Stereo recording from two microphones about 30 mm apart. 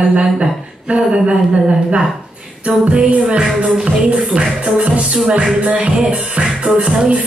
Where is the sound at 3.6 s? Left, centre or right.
Right.